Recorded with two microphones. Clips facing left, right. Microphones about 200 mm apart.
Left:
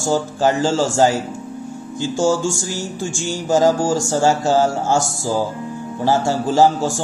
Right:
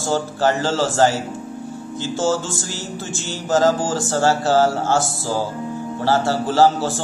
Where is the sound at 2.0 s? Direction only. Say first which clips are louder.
Left 3 dB; 15° left (ahead or behind).